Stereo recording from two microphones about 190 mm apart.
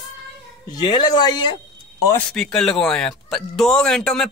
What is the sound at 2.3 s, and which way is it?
Speech, centre (ahead or behind).